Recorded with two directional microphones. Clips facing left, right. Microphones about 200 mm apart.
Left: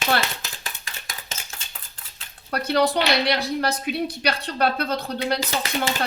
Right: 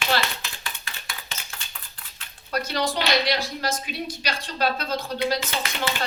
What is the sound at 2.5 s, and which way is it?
A woman's voice, 60° left (ahead or behind).